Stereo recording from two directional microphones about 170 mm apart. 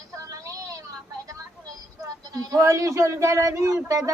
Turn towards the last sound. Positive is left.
turn(degrees=-15)  # may be behind; listen again after turning